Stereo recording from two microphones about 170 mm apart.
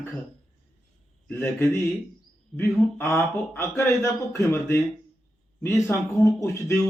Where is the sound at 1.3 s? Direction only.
15° left (ahead or behind).